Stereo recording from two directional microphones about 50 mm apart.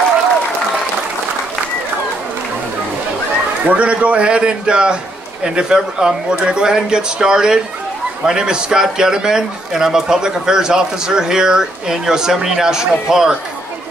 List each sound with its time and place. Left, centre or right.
3.6 s a man's voice: right